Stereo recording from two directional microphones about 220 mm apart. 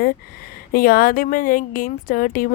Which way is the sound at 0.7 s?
40° left (ahead or behind).